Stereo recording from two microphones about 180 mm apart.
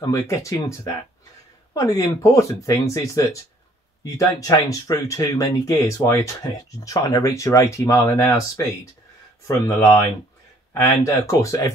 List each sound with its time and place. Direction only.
0.0 s speech: 20° left (ahead or behind)
9.5 s speech: 15° left (ahead or behind)